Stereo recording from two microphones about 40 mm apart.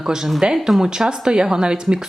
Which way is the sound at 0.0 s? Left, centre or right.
Centre.